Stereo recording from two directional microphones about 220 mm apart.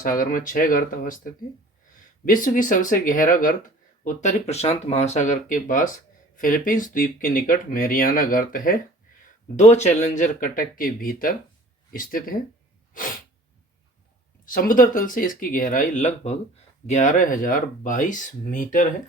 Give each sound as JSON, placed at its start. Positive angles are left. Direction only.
{"t": 0.0, "sound": "speech", "side_deg": 40}
{"t": 14.4, "sound": "speech", "side_deg": 40}